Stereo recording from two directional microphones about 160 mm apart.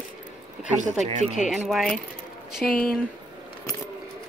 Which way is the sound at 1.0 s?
45° right (ahead or behind).